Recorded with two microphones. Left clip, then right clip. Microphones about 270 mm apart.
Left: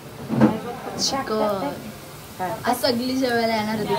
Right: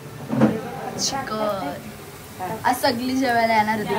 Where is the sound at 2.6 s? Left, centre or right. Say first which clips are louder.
Right 2 dB; centre.